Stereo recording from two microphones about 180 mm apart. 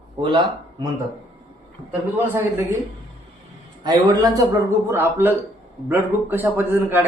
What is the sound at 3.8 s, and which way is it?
A man's voice, 20° right (ahead or behind).